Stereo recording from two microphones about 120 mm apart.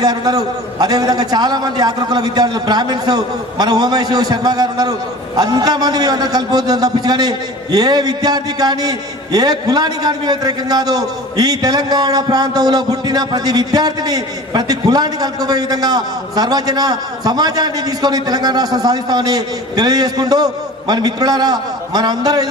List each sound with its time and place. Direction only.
0.0 s a man's voice: 35° right (ahead or behind)